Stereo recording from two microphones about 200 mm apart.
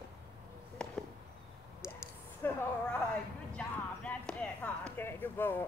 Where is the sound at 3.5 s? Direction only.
5° left (ahead or behind).